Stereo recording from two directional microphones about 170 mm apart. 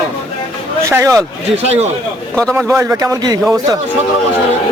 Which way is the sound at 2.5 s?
15° right (ahead or behind).